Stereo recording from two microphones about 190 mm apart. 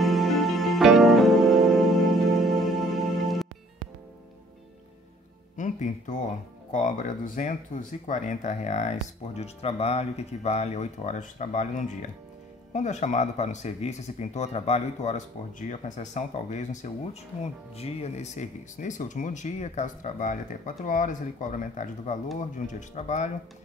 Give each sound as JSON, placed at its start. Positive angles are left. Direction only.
{"t": 0.0, "sound": "music", "side_deg": 0}
{"t": 5.6, "sound": "speech", "side_deg": 40}